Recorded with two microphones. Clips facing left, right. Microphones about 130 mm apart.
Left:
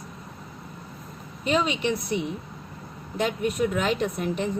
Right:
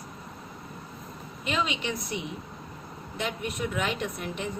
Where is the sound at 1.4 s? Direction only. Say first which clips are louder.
Left 6 dB; 40° left (ahead or behind).